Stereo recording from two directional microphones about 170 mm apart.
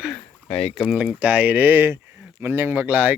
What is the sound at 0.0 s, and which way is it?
Speech, 5° left (ahead or behind).